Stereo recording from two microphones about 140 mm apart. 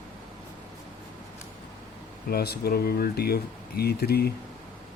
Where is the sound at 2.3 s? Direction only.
90° left.